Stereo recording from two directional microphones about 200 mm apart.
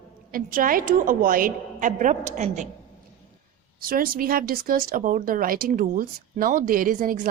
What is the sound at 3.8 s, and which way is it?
Speech, 45° right (ahead or behind).